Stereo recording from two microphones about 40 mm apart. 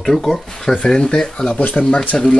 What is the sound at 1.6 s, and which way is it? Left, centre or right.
Speech, left.